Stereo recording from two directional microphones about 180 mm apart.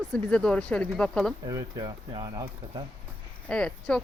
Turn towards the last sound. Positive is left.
turn(degrees=5)  # may be behind; listen again after turning